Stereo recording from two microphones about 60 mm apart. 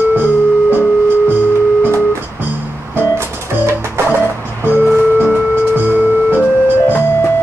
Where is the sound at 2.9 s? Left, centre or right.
Right.